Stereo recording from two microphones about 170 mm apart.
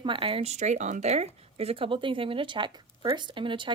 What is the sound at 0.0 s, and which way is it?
A woman's voice, 30° right (ahead or behind).